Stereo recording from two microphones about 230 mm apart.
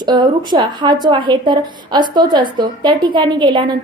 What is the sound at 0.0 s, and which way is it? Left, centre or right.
A woman's voice, centre.